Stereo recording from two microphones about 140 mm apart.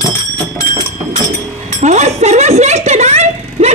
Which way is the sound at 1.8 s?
55° right (ahead or behind).